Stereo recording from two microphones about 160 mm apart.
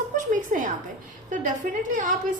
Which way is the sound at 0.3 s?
55° right (ahead or behind).